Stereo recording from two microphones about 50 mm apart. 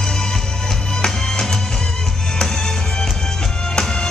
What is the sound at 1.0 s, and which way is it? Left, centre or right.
Music, centre.